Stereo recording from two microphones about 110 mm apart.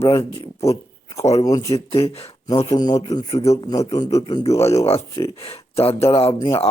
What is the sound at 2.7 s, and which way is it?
Speech, 35° left (ahead or behind).